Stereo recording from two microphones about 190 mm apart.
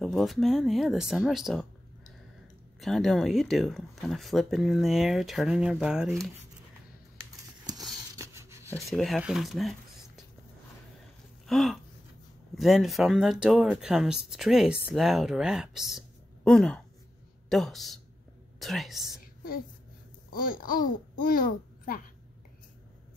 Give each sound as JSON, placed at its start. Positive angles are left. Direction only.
{"t": 0.0, "sound": "speech", "side_deg": 0}
{"t": 2.8, "sound": "speech", "side_deg": 0}
{"t": 8.2, "sound": "a sound", "side_deg": -15}
{"t": 8.7, "sound": "speech", "side_deg": 0}
{"t": 11.4, "sound": "a sound", "side_deg": 0}
{"t": 12.5, "sound": "a woman's voice", "side_deg": 0}
{"t": 20.2, "sound": "a child's voice", "side_deg": 50}